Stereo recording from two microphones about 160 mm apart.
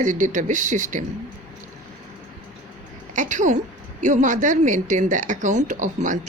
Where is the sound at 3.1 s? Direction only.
50° right (ahead or behind).